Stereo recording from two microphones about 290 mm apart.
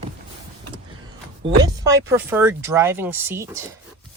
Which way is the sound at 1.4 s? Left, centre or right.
Centre.